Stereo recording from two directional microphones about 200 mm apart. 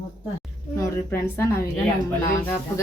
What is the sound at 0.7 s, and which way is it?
Speech, 15° left (ahead or behind).